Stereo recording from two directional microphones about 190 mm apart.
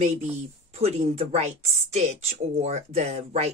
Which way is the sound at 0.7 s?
35° right (ahead or behind).